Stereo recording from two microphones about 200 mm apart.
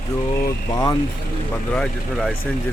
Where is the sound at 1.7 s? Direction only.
5° left (ahead or behind).